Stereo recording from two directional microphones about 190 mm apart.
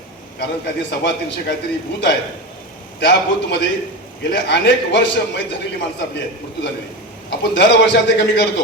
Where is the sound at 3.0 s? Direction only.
60° left (ahead or behind).